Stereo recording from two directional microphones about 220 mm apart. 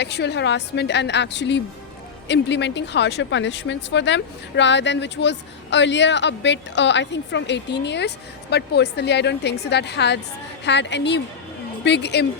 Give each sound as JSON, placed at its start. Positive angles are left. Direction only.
{"t": 0.0, "sound": "a woman's voice", "side_deg": 50}